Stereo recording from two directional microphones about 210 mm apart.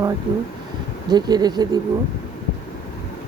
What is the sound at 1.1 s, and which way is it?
Speech, 20° right (ahead or behind).